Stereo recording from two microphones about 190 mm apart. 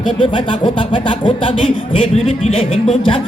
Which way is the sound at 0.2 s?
25° left (ahead or behind).